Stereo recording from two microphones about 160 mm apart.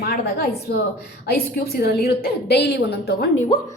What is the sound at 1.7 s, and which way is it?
A woman's voice, 75° left (ahead or behind).